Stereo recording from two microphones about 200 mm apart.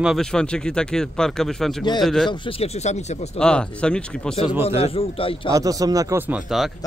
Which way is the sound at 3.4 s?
5° left (ahead or behind).